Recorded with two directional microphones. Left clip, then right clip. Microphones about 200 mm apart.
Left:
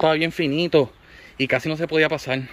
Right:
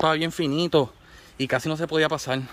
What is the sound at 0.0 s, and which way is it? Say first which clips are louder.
Speech: left 3 dB; 10° left (ahead or behind).